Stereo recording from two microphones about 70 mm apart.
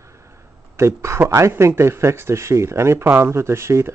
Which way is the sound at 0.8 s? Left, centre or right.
Right.